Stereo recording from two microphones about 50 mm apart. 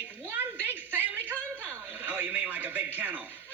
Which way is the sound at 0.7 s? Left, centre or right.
Right.